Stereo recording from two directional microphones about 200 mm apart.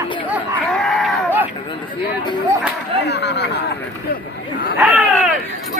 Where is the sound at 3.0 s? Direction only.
55° left (ahead or behind).